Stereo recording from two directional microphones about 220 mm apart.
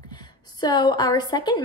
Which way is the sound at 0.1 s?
20° left (ahead or behind).